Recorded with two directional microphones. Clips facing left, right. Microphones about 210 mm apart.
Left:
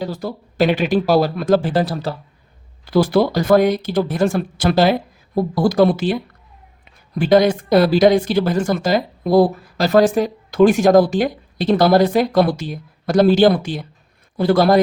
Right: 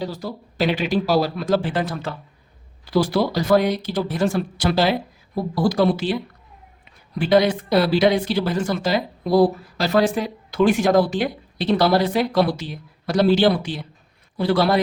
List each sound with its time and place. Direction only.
0.0 s speech: 50° left (ahead or behind); by 2.1 s 35° left (ahead or behind)
2.9 s speech: 55° left (ahead or behind)
7.2 s speech: 45° left (ahead or behind)